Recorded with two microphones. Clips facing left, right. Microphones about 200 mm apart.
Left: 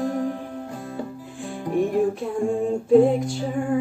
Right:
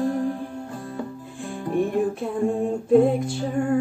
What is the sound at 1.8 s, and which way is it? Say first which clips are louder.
Female singing: left 2 dB; centre (ahead or behind).